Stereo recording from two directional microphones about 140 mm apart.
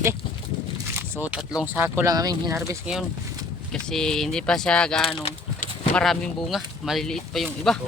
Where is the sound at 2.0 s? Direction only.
25° right (ahead or behind).